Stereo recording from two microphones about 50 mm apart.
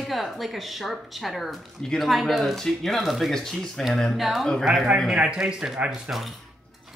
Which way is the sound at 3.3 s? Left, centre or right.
Centre.